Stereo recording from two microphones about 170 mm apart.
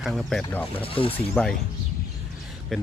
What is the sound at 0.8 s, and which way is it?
Speech, 30° left (ahead or behind).